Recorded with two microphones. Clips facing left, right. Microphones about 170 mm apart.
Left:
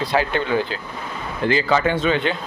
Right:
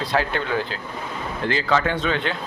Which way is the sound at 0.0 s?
Centre (ahead or behind).